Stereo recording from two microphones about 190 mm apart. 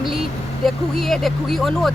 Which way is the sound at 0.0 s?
Centre (ahead or behind).